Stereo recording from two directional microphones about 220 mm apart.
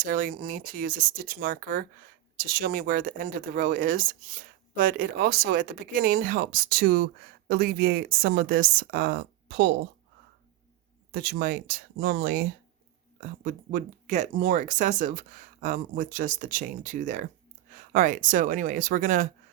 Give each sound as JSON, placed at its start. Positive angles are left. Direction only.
{"t": 0.0, "sound": "speech", "side_deg": -40}
{"t": 11.1, "sound": "speech", "side_deg": -45}